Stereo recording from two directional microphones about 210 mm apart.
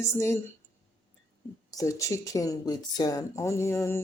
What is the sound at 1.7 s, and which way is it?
Speech, 15° left (ahead or behind).